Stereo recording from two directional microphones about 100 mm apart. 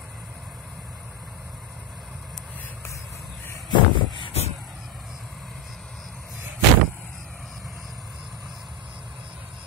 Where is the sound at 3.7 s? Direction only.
55° left (ahead or behind).